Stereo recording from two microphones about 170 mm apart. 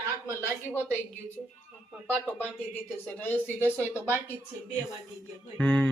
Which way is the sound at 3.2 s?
10° left (ahead or behind).